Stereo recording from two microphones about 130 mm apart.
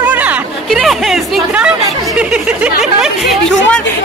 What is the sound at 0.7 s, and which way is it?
Speech, centre (ahead or behind).